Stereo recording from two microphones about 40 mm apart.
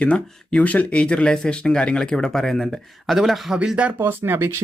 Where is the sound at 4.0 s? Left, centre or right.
Right.